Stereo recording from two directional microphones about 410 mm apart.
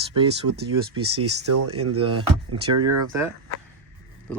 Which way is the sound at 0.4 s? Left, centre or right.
Right.